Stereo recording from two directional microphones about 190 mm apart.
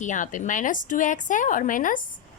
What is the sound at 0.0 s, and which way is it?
A woman's voice, 40° left (ahead or behind).